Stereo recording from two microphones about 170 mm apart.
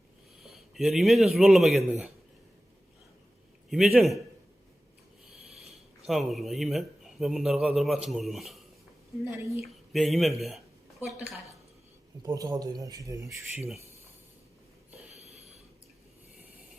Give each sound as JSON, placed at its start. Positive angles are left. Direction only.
{"t": 0.4, "sound": "speech", "side_deg": 0}
{"t": 3.7, "sound": "speech", "side_deg": -5}
{"t": 5.3, "sound": "a sound", "side_deg": 0}
{"t": 6.1, "sound": "speech", "side_deg": 0}
{"t": 9.2, "sound": "a woman's voice", "side_deg": -15}
{"t": 9.9, "sound": "speech", "side_deg": 0}
{"t": 12.2, "sound": "speech", "side_deg": -20}
{"t": 15.1, "sound": "a sound", "side_deg": -40}